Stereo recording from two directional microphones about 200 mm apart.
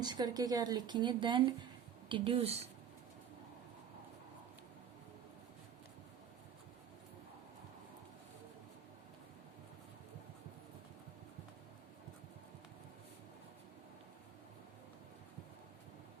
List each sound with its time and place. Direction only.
0.0 s speech: 20° right (ahead or behind)